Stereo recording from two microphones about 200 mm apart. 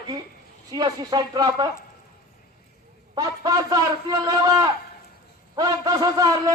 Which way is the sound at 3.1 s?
20° right (ahead or behind).